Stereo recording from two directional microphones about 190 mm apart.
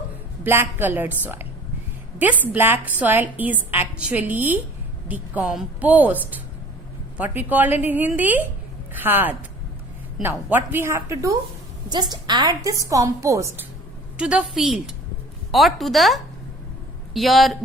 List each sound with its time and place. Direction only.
0.4 s a woman's voice: 10° right (ahead or behind)
7.2 s a woman's voice: 10° right (ahead or behind)
14.2 s a woman's voice: 5° right (ahead or behind)